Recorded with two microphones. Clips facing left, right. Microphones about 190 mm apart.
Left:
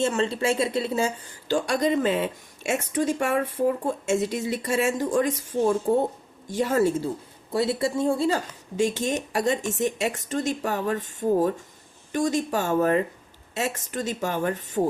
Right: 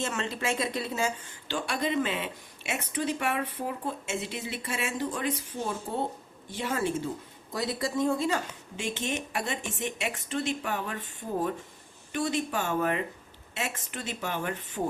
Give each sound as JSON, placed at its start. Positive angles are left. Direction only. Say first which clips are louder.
{"t": 0.0, "sound": "a woman's voice", "louder": "left 8 dB", "side_deg": 30}
{"t": 7.5, "sound": "speech", "louder": "left 6 dB", "side_deg": 25}